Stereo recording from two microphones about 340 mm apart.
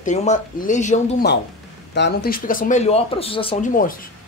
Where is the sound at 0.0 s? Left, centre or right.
Left.